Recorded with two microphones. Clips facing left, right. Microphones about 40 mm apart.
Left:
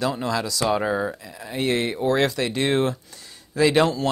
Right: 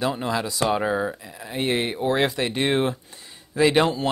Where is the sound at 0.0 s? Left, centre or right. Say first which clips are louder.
Even; right.